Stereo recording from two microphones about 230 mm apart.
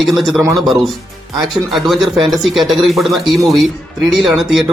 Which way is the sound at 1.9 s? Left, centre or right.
Centre.